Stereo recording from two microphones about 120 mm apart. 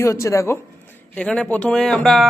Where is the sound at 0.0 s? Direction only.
25° left (ahead or behind).